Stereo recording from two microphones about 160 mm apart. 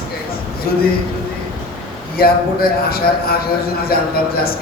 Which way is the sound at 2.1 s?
70° left (ahead or behind).